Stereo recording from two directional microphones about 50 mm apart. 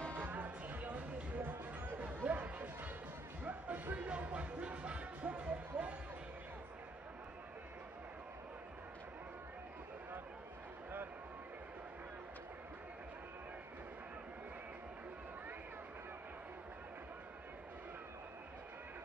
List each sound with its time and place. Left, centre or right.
0.2 s music: right
1.4 s music: right
2.0 s music: right